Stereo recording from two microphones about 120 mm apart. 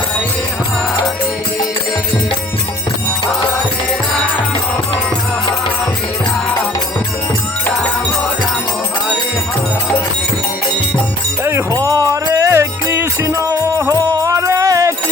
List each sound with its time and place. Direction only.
11.4 s music: 25° right (ahead or behind)